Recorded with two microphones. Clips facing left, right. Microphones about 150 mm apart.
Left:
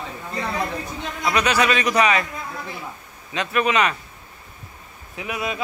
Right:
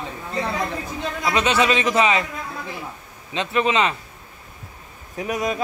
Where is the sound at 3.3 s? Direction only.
25° right (ahead or behind).